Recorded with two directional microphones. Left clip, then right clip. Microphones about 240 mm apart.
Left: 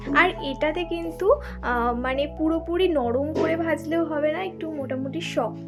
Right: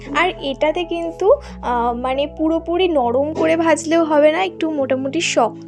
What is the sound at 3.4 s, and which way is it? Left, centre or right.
A woman's voice, right.